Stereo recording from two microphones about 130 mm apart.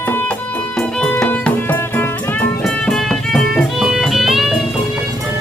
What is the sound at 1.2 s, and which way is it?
Music, 10° left (ahead or behind).